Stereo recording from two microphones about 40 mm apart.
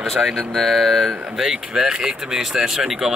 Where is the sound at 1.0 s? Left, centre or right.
Centre.